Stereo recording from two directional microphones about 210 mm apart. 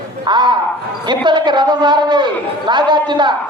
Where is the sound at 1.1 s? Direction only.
20° right (ahead or behind).